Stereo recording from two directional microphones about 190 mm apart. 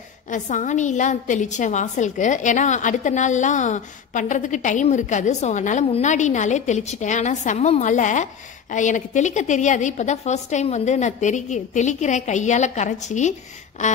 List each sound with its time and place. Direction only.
0.3 s a woman's voice: 40° left (ahead or behind)